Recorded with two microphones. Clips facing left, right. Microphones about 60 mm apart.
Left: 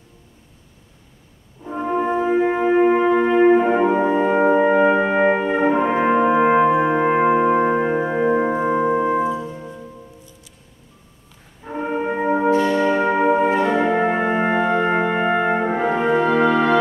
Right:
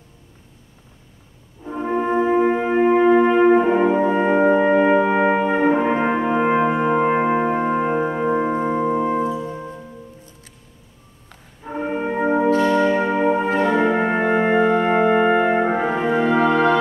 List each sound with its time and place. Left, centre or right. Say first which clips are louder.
1.6 s music: left 1 dB; centre
3.1 s brass instrument: right 2 dB; centre
3.4 s brass instrument: even; centre
4.1 s french horn: even; centre
4.5 s brass instrument: left 1 dB; centre
6.9 s music: left 1 dB; centre
7.7 s music: even; centre
8.1 s music: left 2 dB; centre
11.6 s brass instrument: left 1 dB; centre